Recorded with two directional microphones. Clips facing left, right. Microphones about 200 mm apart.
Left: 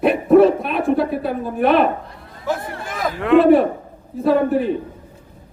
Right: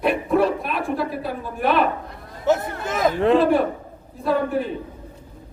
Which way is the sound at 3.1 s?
35° right (ahead or behind).